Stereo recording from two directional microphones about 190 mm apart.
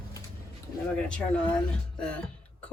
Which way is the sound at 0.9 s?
5° left (ahead or behind).